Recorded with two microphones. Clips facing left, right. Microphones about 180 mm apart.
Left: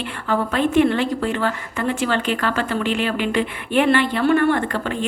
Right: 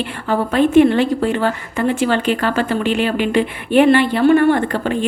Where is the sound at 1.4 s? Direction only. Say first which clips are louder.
Right 4 dB; 30° right (ahead or behind).